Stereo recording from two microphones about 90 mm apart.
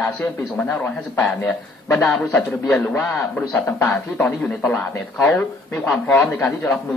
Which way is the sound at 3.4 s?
25° left (ahead or behind).